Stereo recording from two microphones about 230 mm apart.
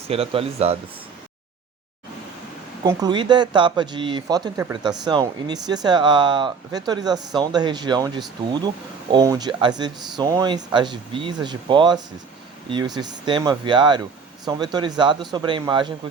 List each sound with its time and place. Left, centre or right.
0.1 s speech: right
2.8 s speech: centre